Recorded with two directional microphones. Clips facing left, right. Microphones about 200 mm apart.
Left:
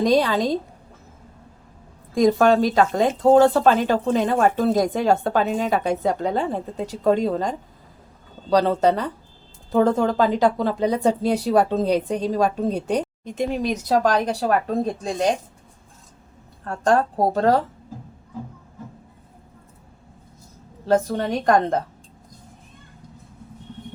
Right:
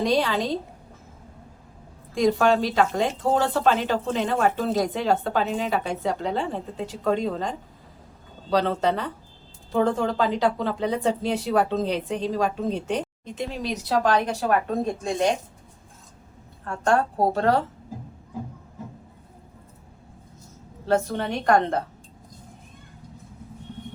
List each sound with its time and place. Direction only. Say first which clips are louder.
0.0 s speech: left 4 dB; 40° left (ahead or behind)
2.1 s a woman's voice: left 4 dB; 45° left (ahead or behind)
16.6 s speech: left 3 dB; 40° left (ahead or behind)
20.8 s speech: left 3 dB; 40° left (ahead or behind)